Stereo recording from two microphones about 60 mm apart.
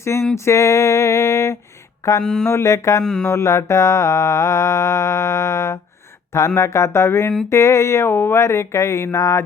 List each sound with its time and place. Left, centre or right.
0.0 s speech: left
0.3 s a sound: left
2.2 s mantra: centre
2.5 s music: left
3.0 s mantra: centre
3.2 s music: left
7.5 s speech: left
9.1 s music: left